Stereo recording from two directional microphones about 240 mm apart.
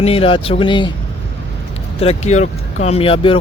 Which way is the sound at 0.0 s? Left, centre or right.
Left.